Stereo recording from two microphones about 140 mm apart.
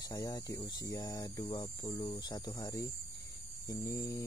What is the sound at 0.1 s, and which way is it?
Speech, 25° left (ahead or behind).